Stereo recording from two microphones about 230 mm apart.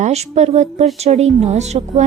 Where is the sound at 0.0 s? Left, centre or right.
Right.